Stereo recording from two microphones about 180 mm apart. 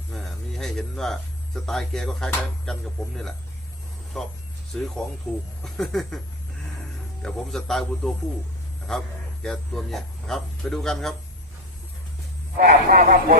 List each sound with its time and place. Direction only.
0.1 s a sound: centre (ahead or behind)
1.6 s speech: centre (ahead or behind)
4.1 s speech: 5° left (ahead or behind)
7.2 s a man's voice: 5° left (ahead or behind)
12.5 s speech: 50° right (ahead or behind)